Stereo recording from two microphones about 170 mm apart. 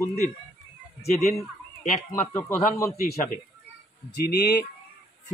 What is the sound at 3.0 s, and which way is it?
Speech, 60° left (ahead or behind).